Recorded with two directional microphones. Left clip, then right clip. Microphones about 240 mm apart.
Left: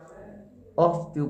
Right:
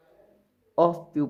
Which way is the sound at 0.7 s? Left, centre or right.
Right.